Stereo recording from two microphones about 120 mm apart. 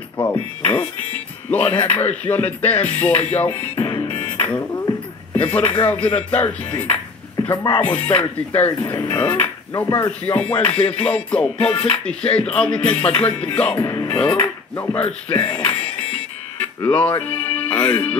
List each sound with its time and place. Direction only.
0.2 s speech: 10° left (ahead or behind)
1.8 s music: 15° left (ahead or behind)
3.7 s music: 40° left (ahead or behind)
4.0 s music: 15° left (ahead or behind)
9.1 s speech: 10° left (ahead or behind)
9.9 s music: 15° left (ahead or behind)
15.2 s speech: 10° left (ahead or behind)
16.8 s music: 15° left (ahead or behind)